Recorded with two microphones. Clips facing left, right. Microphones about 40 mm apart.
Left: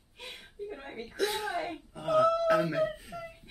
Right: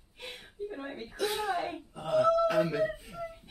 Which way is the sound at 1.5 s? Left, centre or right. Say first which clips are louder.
Right 1 dB; centre.